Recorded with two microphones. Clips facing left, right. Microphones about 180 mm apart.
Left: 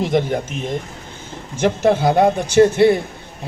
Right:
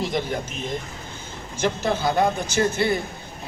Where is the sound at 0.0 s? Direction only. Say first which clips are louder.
Left 7 dB; 65° left (ahead or behind).